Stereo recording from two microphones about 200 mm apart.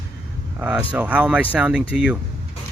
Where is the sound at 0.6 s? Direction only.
5° right (ahead or behind).